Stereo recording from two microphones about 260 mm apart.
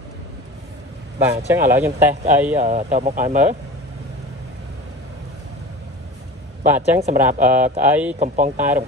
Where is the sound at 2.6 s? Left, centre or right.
Right.